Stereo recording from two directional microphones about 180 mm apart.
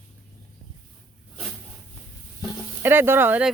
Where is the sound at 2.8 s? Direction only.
10° right (ahead or behind).